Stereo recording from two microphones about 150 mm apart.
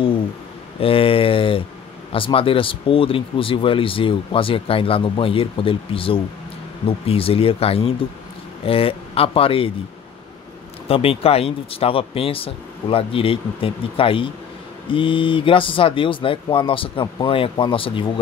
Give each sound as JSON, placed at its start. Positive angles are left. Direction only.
{"t": 0.7, "sound": "speech", "side_deg": 40}
{"t": 10.9, "sound": "speech", "side_deg": 40}